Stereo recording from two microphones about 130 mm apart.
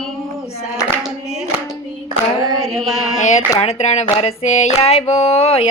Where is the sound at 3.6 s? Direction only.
55° left (ahead or behind).